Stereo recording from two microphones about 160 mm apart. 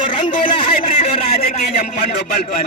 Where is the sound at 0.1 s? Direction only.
30° left (ahead or behind).